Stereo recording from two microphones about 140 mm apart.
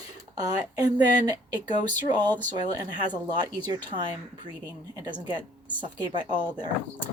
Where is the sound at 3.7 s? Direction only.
30° right (ahead or behind).